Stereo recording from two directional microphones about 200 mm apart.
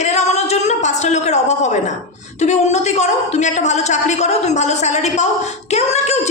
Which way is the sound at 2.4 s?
35° left (ahead or behind).